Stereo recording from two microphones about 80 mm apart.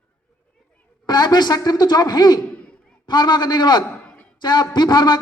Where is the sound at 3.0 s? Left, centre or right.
Left.